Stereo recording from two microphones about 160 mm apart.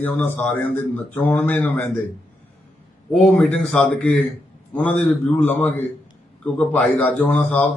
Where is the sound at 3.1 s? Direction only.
5° left (ahead or behind).